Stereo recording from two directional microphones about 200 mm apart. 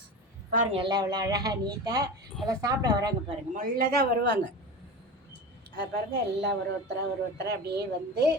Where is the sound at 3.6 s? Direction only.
50° right (ahead or behind).